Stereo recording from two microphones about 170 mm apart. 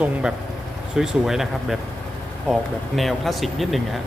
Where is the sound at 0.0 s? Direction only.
5° right (ahead or behind).